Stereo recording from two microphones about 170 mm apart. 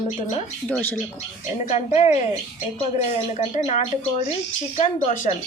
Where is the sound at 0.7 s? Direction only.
10° left (ahead or behind).